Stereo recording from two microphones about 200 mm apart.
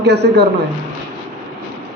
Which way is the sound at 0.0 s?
55° right (ahead or behind).